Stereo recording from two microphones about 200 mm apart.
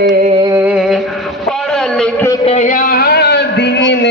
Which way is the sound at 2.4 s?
35° left (ahead or behind).